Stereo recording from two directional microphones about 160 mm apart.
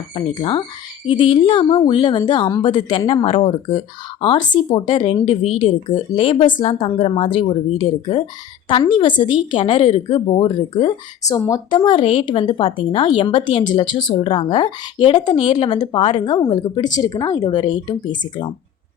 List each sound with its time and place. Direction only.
0.1 s a woman's voice: 30° left (ahead or behind)
11.3 s a woman's voice: 20° left (ahead or behind)